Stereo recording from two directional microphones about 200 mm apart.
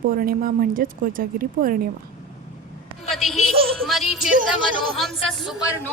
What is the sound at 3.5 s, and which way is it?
Music, 30° right (ahead or behind).